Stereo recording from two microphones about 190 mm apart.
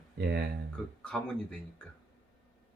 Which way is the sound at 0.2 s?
60° right (ahead or behind).